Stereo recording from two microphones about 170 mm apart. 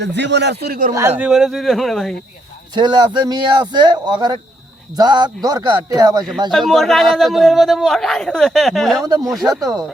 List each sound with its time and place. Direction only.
0.0 s a man's voice: 90° right; by 0.9 s 55° right (ahead or behind)
0.9 s a man's voice: 15° right (ahead or behind)
1.3 s a man's voice: centre (ahead or behind)
2.7 s speech: 25° right (ahead or behind)
6.5 s a man's voice: centre (ahead or behind)
9.0 s speech: 25° right (ahead or behind)